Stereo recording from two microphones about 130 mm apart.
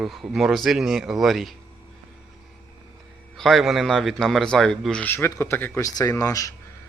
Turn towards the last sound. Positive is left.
turn(degrees=25)  # may be behind; listen again after turning